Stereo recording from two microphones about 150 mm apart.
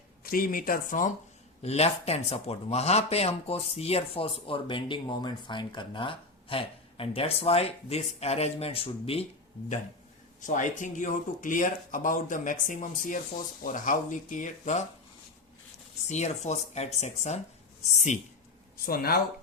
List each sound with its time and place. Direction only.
0.3 s speech: 70° left (ahead or behind)
1.6 s speech: 45° left (ahead or behind)
10.4 s speech: 60° left (ahead or behind)
16.0 s speech: 50° left (ahead or behind)
18.9 s speech: 85° left